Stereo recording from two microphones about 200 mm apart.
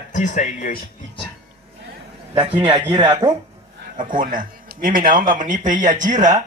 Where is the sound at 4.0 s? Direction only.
40° right (ahead or behind).